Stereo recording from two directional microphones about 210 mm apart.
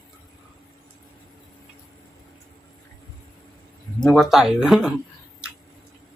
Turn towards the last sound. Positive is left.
turn(degrees=0)  # may be behind; listen again after turning